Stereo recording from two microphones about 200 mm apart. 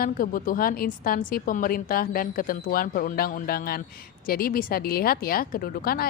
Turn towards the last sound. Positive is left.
turn(degrees=45)  # may be behind; listen again after turning